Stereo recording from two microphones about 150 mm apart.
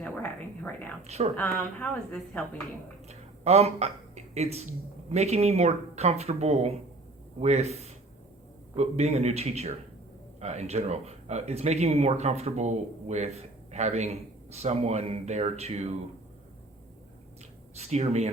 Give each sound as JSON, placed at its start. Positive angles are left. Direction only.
{"t": 0.0, "sound": "a sound", "side_deg": 10}
{"t": 1.0, "sound": "speech", "side_deg": -45}
{"t": 1.4, "sound": "a woman's voice", "side_deg": 10}
{"t": 3.1, "sound": "speech", "side_deg": -45}
{"t": 17.7, "sound": "speech", "side_deg": -45}